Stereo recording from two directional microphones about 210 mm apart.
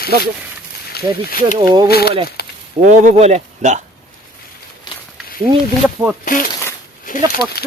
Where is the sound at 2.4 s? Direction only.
50° left (ahead or behind).